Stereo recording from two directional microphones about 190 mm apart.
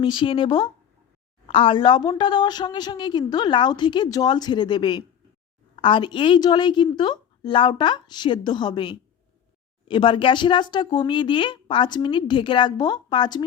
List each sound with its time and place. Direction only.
0.0 s a woman's voice: 25° left (ahead or behind)